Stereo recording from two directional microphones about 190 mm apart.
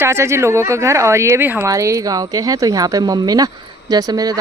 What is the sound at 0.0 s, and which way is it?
A woman's voice, 15° right (ahead or behind).